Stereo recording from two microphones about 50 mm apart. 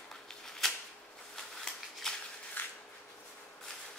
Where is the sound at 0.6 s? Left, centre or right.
Centre.